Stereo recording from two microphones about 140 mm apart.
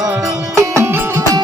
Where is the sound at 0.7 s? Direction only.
15° right (ahead or behind).